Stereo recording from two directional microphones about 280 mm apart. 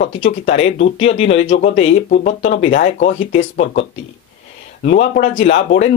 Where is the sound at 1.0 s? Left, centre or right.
Left.